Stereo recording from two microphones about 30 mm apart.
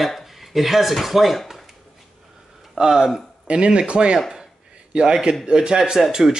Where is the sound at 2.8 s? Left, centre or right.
Right.